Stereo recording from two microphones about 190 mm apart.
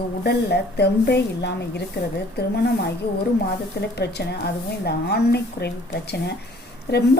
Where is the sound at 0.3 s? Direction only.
60° left (ahead or behind).